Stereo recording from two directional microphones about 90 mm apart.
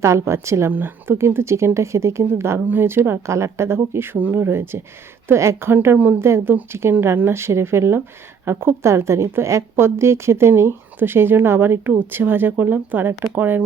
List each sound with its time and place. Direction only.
0.0 s a woman's voice: 30° right (ahead or behind)